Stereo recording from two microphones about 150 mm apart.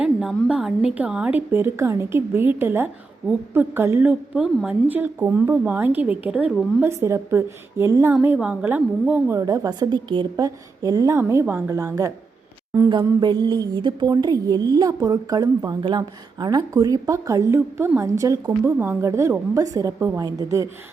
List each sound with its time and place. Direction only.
0.0 s a woman's voice: 5° right (ahead or behind); by 8.1 s 20° right (ahead or behind)
8.1 s a woman's voice: 10° right (ahead or behind)
13.1 s a woman's voice: 25° right (ahead or behind)